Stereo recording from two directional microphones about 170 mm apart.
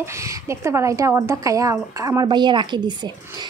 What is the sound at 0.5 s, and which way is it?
A woman's voice, 15° right (ahead or behind).